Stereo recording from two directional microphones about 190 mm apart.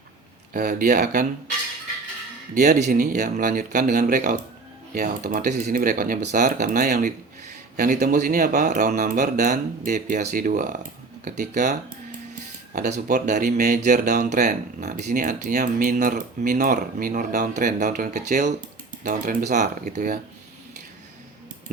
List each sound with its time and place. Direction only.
0.5 s speech: 45° right (ahead or behind)
2.6 s speech: 40° right (ahead or behind)